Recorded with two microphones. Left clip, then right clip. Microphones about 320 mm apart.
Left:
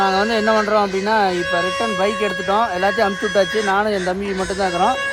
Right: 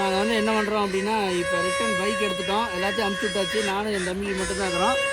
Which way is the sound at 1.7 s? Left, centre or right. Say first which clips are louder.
Left 5 dB; left.